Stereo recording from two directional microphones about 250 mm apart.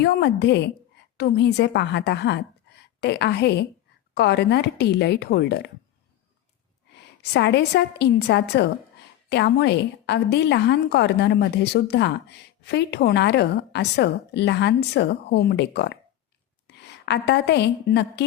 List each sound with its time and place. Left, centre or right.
0.0 s a woman's voice: left
7.2 s a woman's voice: left